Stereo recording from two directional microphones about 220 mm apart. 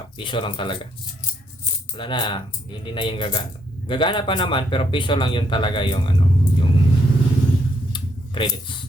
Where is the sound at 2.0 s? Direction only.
20° left (ahead or behind).